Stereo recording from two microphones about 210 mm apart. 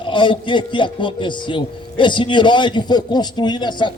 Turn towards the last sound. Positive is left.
turn(degrees=20)  # may be behind; listen again after turning